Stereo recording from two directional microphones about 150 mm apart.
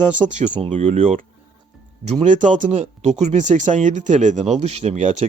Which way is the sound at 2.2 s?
55° right (ahead or behind).